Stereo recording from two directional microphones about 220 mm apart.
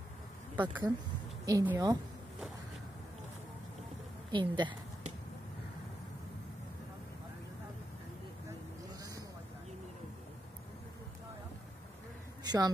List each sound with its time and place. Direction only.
0.6 s a woman's voice: 10° right (ahead or behind)
4.3 s a sound: 20° right (ahead or behind)
12.4 s a woman's voice: 15° right (ahead or behind)